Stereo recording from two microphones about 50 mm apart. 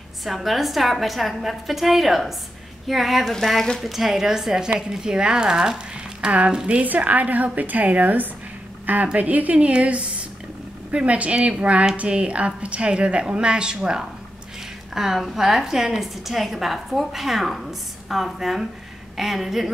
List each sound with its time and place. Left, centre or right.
0.2 s a woman's voice: centre
3.8 s speech: centre
6.2 s a woman's voice: right
6.8 s a woman's voice: right; by 19.7 s centre